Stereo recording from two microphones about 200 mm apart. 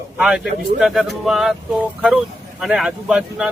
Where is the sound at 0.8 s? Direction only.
Centre (ahead or behind).